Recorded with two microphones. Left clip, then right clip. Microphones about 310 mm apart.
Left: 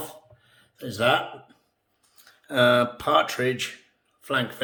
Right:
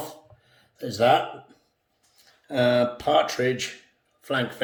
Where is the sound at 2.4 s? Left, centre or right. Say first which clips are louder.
Left 2 dB; centre.